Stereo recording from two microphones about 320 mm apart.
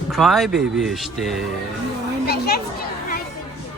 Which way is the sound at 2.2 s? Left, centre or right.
Left.